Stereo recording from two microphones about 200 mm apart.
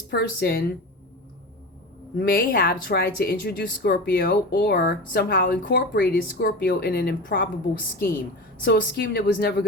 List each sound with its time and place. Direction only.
0.1 s speech: 50° left (ahead or behind)
2.1 s speech: 50° left (ahead or behind)
8.6 s speech: 55° left (ahead or behind)